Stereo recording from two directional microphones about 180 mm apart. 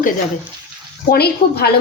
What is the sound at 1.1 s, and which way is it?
Speech, 60° left (ahead or behind).